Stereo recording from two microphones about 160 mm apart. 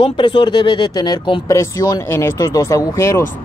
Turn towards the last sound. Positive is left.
turn(degrees=20)  # may be behind; listen again after turning